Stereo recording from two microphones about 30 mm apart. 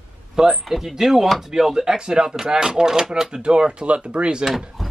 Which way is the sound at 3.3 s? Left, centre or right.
Right.